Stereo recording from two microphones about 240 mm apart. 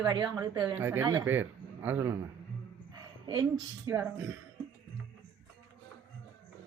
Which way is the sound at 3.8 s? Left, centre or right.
Centre.